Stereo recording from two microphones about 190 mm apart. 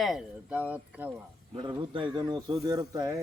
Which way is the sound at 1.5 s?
25° right (ahead or behind).